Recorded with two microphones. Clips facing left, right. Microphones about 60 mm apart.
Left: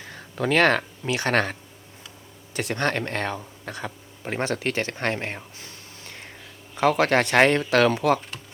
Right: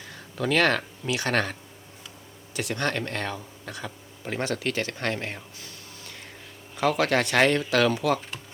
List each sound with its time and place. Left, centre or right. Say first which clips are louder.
0.1 s speech: left 2 dB; left